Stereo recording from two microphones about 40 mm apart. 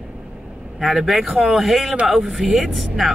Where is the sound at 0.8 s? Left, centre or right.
Centre.